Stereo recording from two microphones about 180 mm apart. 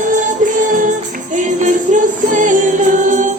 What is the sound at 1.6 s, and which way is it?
Music, 45° right (ahead or behind).